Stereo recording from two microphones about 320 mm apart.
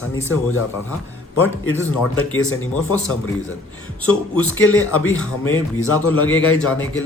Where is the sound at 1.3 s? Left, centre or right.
Left.